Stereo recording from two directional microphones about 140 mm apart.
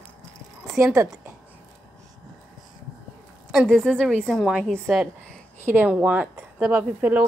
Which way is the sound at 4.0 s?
10° right (ahead or behind).